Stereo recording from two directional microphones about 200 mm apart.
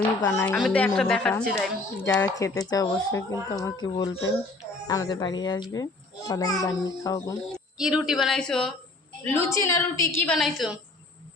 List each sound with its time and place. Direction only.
0.3 s a woman's voice: 10° left (ahead or behind)
7.5 s a woman's voice: 5° right (ahead or behind)
10.3 s a woman's voice: centre (ahead or behind)